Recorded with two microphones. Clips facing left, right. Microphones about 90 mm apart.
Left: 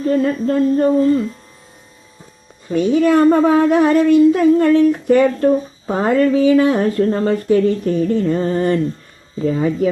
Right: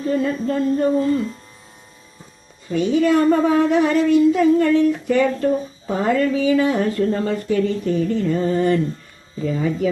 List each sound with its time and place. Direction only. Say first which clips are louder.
0.1 s speech: left 4 dB; 45° left (ahead or behind)
2.6 s speech: left 3 dB; 45° left (ahead or behind)